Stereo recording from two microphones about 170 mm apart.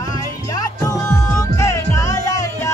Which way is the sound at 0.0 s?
20° left (ahead or behind).